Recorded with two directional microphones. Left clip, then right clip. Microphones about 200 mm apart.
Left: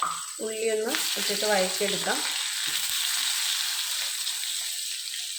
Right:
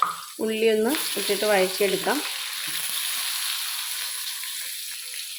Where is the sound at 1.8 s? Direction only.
55° right (ahead or behind).